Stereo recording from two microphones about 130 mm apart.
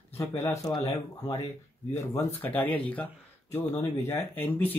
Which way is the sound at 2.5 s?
15° left (ahead or behind).